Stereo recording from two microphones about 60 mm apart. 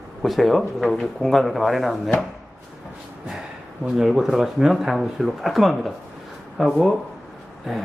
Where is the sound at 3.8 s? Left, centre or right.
Centre.